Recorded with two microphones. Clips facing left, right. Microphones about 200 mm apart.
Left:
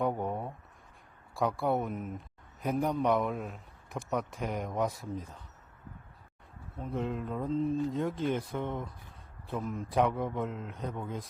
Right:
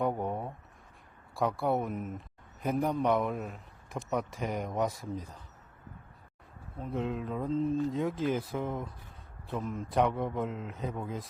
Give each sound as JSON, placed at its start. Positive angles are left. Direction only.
{"t": 0.0, "sound": "a sound", "side_deg": 0}
{"t": 1.4, "sound": "a man's voice", "side_deg": 0}
{"t": 6.7, "sound": "a man's voice", "side_deg": 0}